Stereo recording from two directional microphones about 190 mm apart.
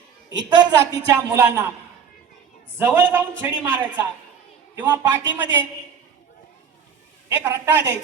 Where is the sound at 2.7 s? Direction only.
10° right (ahead or behind).